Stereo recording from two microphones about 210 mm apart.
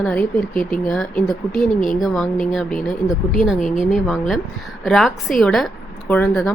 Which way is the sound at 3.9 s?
Centre (ahead or behind).